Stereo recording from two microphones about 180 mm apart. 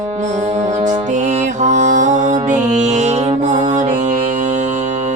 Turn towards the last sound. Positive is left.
turn(degrees=-40)  # may be behind; listen again after turning